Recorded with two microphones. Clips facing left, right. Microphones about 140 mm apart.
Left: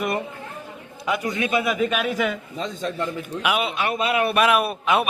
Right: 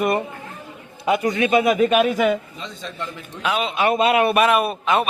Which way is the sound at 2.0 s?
40° right (ahead or behind).